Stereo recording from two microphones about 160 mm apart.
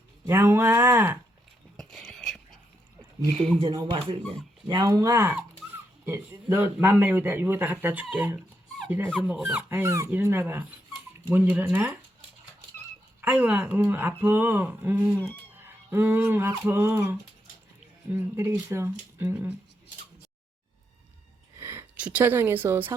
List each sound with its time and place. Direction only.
0.3 s speech: 15° right (ahead or behind)
1.7 s whispering: centre (ahead or behind)
3.3 s speech: 5° left (ahead or behind)
3.6 s speech: 30° right (ahead or behind)
4.7 s speech: 20° right (ahead or behind)
13.2 s speech: 10° right (ahead or behind)
21.6 s a woman's voice: 15° right (ahead or behind)